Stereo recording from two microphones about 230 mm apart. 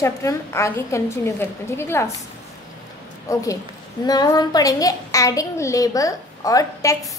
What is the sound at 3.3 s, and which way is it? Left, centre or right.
A woman's voice, centre.